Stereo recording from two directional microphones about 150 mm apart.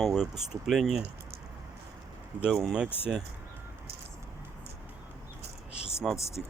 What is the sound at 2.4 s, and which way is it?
Speech, centre (ahead or behind).